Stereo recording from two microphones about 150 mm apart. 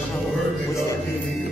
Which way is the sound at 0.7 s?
20° left (ahead or behind).